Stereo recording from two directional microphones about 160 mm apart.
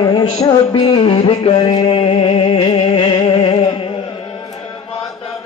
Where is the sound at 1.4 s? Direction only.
30° left (ahead or behind).